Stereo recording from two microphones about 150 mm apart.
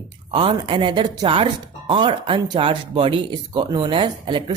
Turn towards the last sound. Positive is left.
turn(degrees=-30)  # may be behind; listen again after turning